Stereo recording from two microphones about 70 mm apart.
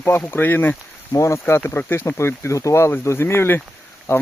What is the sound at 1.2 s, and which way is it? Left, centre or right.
Speech, left.